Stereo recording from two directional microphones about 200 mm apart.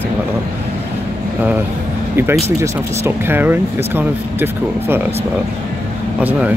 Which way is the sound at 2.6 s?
10° right (ahead or behind).